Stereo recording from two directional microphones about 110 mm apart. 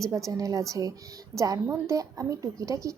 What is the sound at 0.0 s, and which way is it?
A woman's voice, 30° right (ahead or behind).